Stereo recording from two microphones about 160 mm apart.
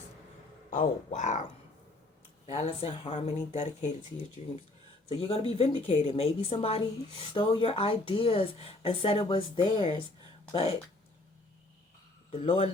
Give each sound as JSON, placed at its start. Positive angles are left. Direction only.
{"t": 0.7, "sound": "speech", "side_deg": 55}
{"t": 2.5, "sound": "speech", "side_deg": 40}
{"t": 5.0, "sound": "speech", "side_deg": 40}
{"t": 12.3, "sound": "speech", "side_deg": 40}